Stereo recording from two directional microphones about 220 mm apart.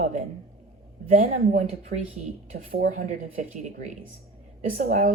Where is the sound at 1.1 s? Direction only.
35° right (ahead or behind).